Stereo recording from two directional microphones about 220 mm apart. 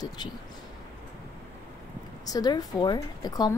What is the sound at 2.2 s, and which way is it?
A woman's voice, 15° left (ahead or behind).